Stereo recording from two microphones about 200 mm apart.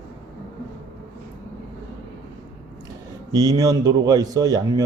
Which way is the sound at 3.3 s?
20° right (ahead or behind).